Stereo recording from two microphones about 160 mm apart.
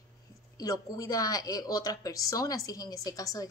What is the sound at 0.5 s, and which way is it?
A woman's voice, 20° left (ahead or behind).